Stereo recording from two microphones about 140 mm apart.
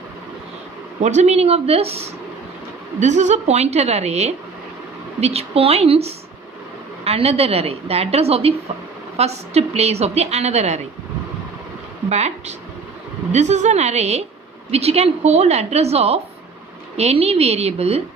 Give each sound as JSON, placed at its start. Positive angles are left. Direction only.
{"t": 1.0, "sound": "a woman's voice", "side_deg": -55}
{"t": 3.0, "sound": "a woman's voice", "side_deg": -55}
{"t": 12.0, "sound": "a woman's voice", "side_deg": -50}